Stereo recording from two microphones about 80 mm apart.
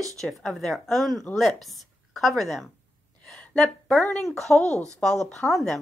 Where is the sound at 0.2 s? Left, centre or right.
Centre.